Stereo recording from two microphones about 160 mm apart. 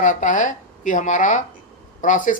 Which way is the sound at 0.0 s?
50° left (ahead or behind).